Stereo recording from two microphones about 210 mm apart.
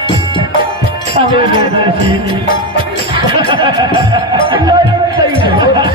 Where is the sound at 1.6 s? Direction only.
25° right (ahead or behind).